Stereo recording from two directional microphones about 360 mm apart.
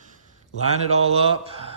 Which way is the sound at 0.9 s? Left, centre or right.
Centre.